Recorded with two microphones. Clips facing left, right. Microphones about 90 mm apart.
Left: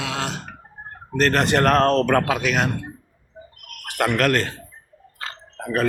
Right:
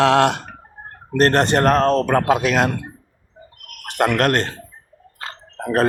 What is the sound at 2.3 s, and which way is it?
Speech, 40° right (ahead or behind).